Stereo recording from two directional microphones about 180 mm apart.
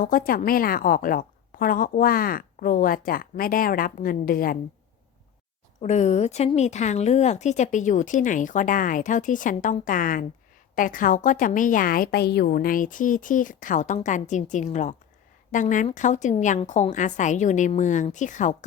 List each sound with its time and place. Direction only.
0.0 s a woman's voice: 50° left (ahead or behind)
5.8 s a woman's voice: 40° left (ahead or behind)